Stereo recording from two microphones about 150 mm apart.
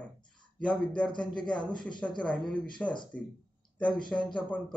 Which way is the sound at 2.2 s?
5° left (ahead or behind).